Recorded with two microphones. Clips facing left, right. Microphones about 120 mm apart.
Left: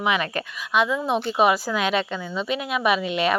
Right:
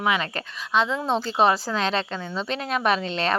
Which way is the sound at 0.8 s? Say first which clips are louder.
Left 2 dB; 20° right (ahead or behind).